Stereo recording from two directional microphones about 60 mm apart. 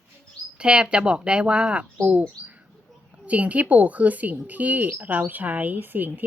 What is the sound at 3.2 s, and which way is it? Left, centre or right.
Speech, right.